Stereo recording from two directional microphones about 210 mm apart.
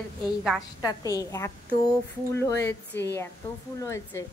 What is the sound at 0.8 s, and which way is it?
A woman's voice, 15° left (ahead or behind).